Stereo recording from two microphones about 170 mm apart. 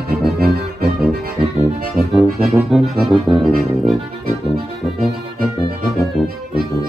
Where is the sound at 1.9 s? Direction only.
Centre (ahead or behind).